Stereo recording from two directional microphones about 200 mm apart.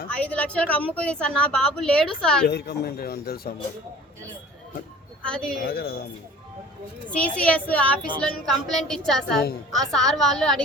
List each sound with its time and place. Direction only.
0.1 s a woman's voice: 5° left (ahead or behind)
2.5 s speech: 55° left (ahead or behind)
5.3 s a woman's voice: 5° left (ahead or behind)
5.6 s speech: 50° left (ahead or behind)
7.1 s a woman's voice: 5° left (ahead or behind)